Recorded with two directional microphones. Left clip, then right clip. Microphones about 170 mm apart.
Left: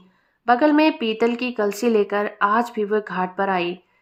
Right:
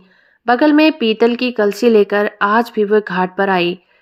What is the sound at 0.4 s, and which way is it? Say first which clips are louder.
Speech: right 5 dB; 25° right (ahead or behind).